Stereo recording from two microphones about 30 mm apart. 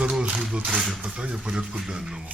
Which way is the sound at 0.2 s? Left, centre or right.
Right.